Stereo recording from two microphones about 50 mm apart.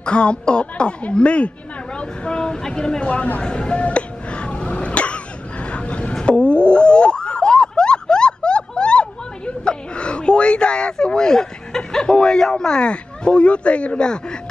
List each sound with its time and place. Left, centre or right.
0.0 s a woman's voice: left
3.1 s a sound: left
6.1 s boing: left
9.5 s speech: left